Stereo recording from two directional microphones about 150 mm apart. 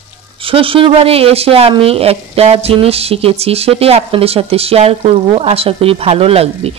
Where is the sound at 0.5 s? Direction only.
35° right (ahead or behind).